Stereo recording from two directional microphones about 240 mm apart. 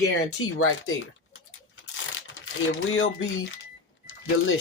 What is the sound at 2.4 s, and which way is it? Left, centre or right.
Speech, left.